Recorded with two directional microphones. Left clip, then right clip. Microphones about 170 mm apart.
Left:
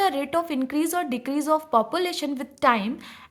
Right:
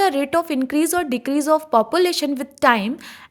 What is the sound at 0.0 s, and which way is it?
A woman's voice, 35° right (ahead or behind).